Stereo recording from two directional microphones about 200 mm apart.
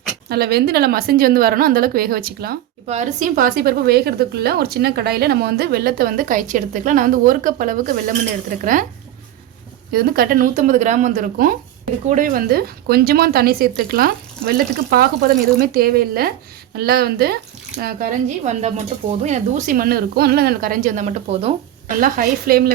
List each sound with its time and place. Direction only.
0.3 s a woman's voice: 50° right (ahead or behind)
2.8 s a woman's voice: 35° right (ahead or behind)
9.9 s a woman's voice: 50° right (ahead or behind)
18.4 s a woman's voice: 35° right (ahead or behind)